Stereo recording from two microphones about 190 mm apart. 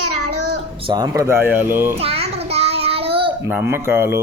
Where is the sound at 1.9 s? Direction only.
30° right (ahead or behind).